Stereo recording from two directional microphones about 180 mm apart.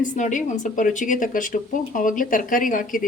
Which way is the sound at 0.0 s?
45° left (ahead or behind).